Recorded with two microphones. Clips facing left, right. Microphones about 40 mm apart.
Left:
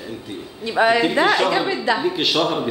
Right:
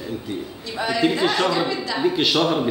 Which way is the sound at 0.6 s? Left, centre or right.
Left.